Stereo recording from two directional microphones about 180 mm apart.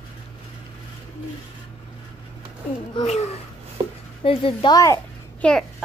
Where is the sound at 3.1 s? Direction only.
40° left (ahead or behind).